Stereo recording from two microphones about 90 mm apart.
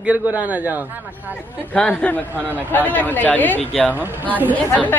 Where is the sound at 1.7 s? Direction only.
15° left (ahead or behind).